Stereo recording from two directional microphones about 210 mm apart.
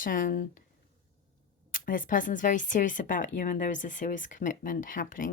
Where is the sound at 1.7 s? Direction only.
40° left (ahead or behind).